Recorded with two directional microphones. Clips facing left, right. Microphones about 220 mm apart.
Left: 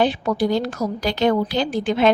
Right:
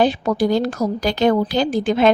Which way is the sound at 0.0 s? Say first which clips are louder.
Right 2 dB; 40° right (ahead or behind).